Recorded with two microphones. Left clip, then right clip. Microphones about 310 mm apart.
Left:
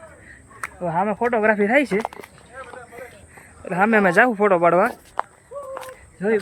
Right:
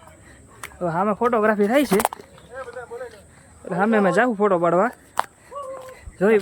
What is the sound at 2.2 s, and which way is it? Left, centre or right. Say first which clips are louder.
Speech: left 4 dB; left.